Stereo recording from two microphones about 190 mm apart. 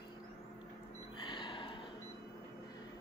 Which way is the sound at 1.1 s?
25° left (ahead or behind).